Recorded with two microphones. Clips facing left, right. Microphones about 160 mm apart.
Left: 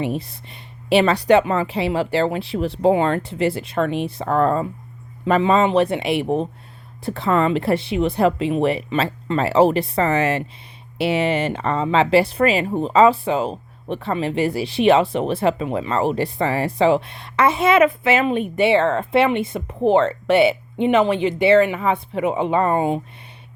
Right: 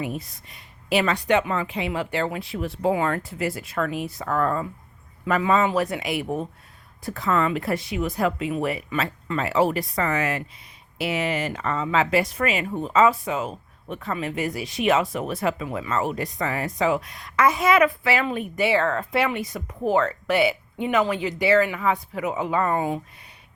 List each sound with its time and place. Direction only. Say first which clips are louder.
0.0 s speech: left 6 dB; 30° left (ahead or behind)